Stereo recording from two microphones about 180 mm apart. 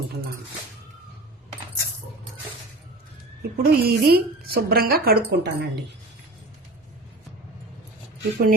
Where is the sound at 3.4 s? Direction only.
60° right (ahead or behind).